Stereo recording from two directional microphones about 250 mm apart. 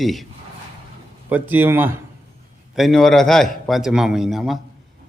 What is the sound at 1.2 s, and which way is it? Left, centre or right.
A man's voice, centre.